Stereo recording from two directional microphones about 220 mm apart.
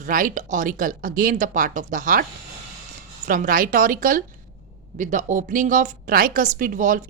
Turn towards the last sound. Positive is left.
turn(degrees=-35)  # may be behind; listen again after turning